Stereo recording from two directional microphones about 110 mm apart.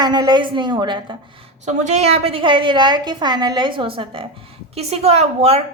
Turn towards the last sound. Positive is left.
turn(degrees=-70)  # may be behind; listen again after turning